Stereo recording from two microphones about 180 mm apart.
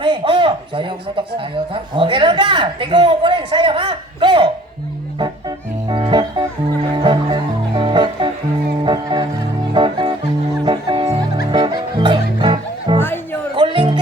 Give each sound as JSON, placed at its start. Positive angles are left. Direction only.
{"t": 0.0, "sound": "a man's voice", "side_deg": -25}
{"t": 5.2, "sound": "music", "side_deg": -25}
{"t": 13.0, "sound": "music", "side_deg": 10}
{"t": 13.6, "sound": "music", "side_deg": -25}